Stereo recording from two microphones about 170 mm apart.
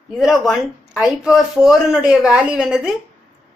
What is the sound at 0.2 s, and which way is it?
Speech, centre (ahead or behind).